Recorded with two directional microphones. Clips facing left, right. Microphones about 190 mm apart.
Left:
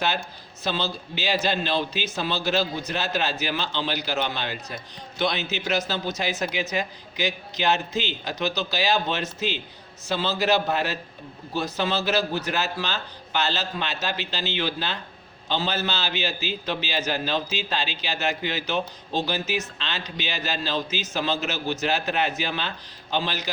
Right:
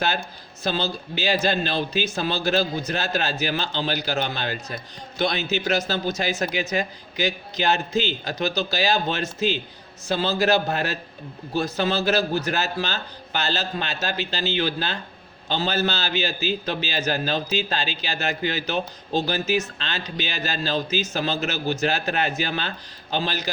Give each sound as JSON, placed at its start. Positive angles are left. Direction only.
{"t": 0.6, "sound": "a man's voice", "side_deg": -45}